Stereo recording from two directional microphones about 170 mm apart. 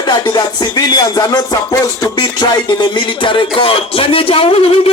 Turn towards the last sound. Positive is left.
turn(degrees=35)  # may be behind; listen again after turning